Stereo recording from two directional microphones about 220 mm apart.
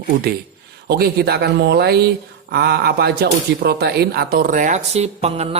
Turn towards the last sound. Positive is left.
turn(degrees=-30)  # may be behind; listen again after turning